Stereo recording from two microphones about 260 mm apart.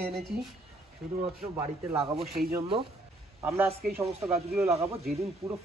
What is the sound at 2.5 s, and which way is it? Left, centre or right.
Speech, centre.